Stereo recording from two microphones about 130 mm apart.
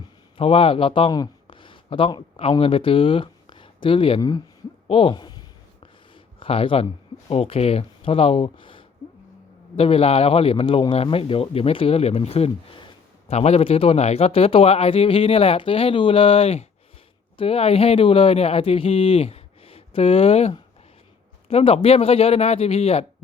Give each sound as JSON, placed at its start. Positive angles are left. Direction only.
{"t": 0.3, "sound": "speech", "side_deg": 45}
{"t": 6.4, "sound": "a man's voice", "side_deg": 45}